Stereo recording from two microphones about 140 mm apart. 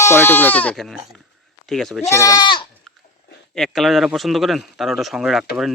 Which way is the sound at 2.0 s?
20° left (ahead or behind).